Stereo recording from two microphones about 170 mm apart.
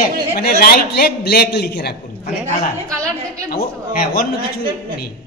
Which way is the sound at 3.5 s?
60° left (ahead or behind).